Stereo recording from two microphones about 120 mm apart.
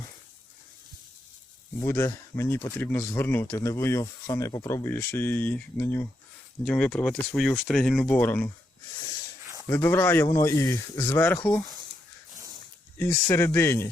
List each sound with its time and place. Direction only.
1.8 s speech: 25° left (ahead or behind)
6.7 s speech: 10° left (ahead or behind)
9.6 s speech: 20° left (ahead or behind)
13.0 s speech: 20° left (ahead or behind)